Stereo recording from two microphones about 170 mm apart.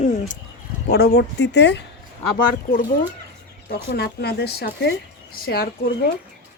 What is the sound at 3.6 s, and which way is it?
Speech, 75° left (ahead or behind).